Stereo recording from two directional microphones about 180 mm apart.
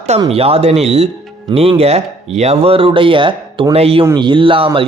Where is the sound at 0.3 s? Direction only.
35° right (ahead or behind).